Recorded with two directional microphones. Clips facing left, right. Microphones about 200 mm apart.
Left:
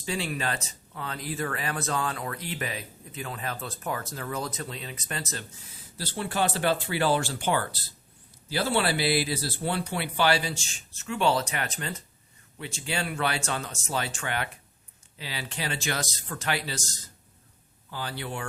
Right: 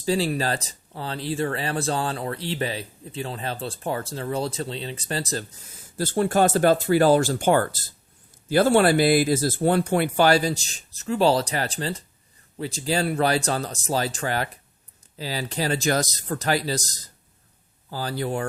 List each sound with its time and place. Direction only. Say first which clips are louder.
0.0 s speech: right 7 dB; 35° right (ahead or behind)